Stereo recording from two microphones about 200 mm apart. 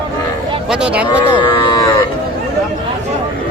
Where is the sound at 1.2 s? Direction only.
25° left (ahead or behind).